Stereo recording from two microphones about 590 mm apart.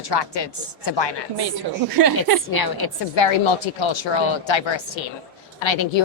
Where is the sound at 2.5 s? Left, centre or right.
Left.